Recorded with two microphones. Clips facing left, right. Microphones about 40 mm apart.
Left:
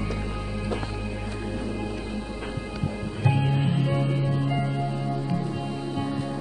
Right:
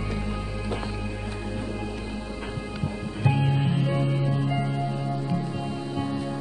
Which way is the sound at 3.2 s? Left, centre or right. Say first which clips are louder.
Even; centre.